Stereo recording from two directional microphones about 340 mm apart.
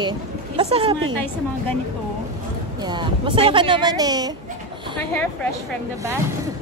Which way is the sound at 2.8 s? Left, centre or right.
Centre.